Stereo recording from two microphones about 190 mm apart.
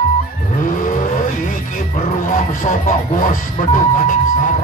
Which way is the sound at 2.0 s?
45° left (ahead or behind).